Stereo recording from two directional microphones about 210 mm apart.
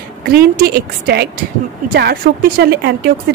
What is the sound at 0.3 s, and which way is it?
A woman's voice, 45° right (ahead or behind).